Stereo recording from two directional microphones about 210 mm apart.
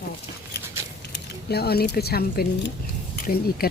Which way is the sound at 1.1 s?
50° left (ahead or behind).